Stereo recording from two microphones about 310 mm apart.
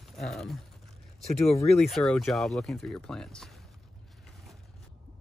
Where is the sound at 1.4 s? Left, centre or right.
Centre.